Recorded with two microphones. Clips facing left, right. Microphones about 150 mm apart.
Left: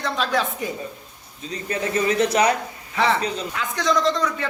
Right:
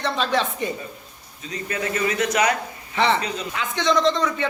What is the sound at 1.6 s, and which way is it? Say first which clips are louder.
Speech: left 2 dB; 30° left (ahead or behind).